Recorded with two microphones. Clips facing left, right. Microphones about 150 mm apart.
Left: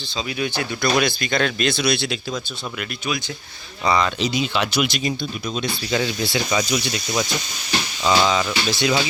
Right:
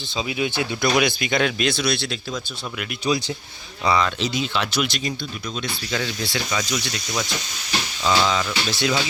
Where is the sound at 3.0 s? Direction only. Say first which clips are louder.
Right 6 dB; 30° right (ahead or behind).